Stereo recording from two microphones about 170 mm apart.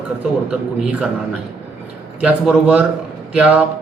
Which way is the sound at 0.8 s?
5° right (ahead or behind).